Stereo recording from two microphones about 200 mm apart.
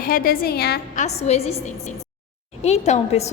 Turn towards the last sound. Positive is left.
turn(degrees=35)  # may be behind; listen again after turning